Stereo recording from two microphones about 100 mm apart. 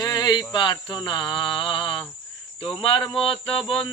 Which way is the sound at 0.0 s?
40° left (ahead or behind).